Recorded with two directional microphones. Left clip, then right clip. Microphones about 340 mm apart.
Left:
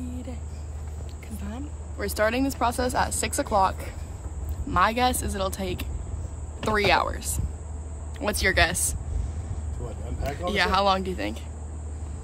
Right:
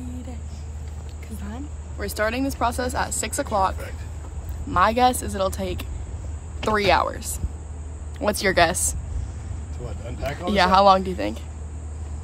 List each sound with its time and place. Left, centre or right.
1.3 s speech: centre
10.2 s speech: centre